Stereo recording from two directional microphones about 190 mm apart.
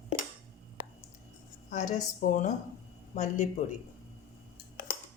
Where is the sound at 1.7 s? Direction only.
40° left (ahead or behind).